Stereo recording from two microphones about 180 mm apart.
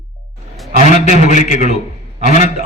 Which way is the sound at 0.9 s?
40° left (ahead or behind).